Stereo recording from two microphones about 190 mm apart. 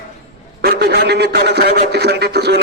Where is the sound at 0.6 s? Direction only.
60° right (ahead or behind).